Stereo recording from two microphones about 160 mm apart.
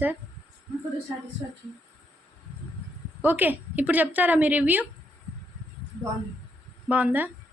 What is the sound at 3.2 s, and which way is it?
A woman's voice, 10° right (ahead or behind).